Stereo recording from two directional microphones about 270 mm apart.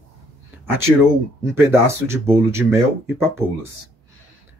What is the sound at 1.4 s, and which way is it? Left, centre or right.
Speech, centre.